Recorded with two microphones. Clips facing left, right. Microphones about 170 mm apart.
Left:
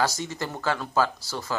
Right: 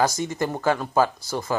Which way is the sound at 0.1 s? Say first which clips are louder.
Right 5 dB; 50° right (ahead or behind).